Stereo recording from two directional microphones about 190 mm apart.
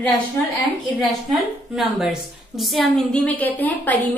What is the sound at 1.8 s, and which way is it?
A woman's voice, centre (ahead or behind).